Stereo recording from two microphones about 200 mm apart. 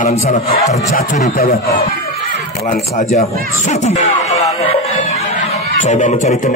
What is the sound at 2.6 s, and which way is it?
Speech, 35° left (ahead or behind).